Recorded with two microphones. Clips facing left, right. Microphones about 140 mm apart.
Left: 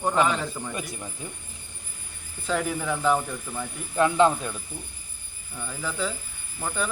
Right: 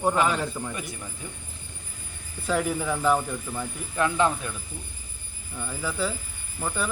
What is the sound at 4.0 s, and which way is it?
Speech, 20° left (ahead or behind).